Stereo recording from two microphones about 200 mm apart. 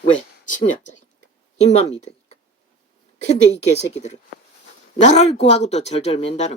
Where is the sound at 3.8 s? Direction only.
35° left (ahead or behind).